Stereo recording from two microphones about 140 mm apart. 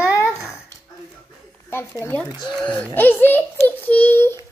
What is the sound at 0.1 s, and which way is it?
Babbling, 20° left (ahead or behind).